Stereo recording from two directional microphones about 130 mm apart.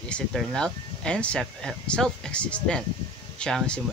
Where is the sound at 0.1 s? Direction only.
Centre (ahead or behind).